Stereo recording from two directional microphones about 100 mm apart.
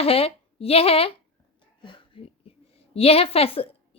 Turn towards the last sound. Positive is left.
turn(degrees=70)  # may be behind; listen again after turning